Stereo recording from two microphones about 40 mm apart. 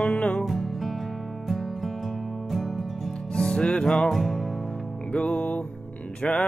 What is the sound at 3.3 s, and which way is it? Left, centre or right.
Music, centre.